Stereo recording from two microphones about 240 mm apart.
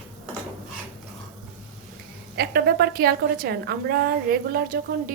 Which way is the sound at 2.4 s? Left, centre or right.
Right.